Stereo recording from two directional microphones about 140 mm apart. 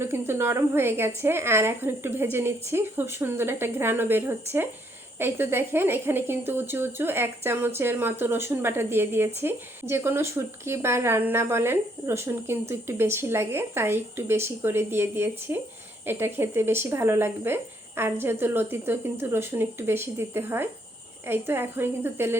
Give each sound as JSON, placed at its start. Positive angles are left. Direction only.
{"t": 0.0, "sound": "a woman's voice", "side_deg": -15}